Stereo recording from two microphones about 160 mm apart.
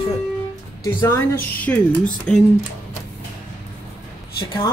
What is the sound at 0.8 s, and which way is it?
Speech, 15° left (ahead or behind).